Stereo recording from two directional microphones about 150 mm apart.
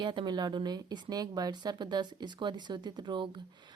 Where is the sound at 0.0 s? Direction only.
30° right (ahead or behind).